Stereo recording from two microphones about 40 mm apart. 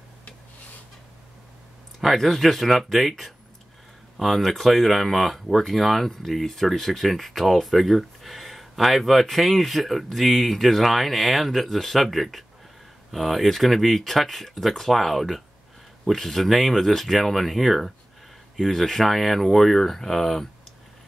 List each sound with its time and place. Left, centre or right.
2.0 s speech: centre